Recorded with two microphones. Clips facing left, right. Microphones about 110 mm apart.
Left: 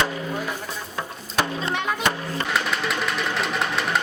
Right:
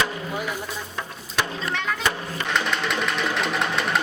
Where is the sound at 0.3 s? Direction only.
5° right (ahead or behind).